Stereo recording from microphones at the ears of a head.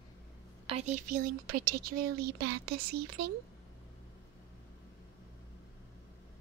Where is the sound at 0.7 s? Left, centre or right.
Right.